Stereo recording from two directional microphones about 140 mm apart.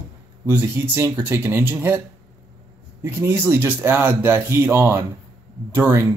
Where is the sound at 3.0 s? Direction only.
20° right (ahead or behind).